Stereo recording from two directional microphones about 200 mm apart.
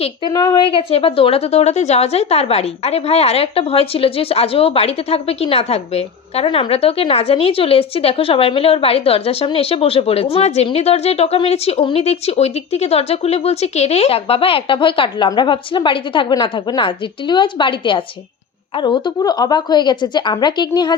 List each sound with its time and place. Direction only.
0.3 s a woman's voice: 20° left (ahead or behind)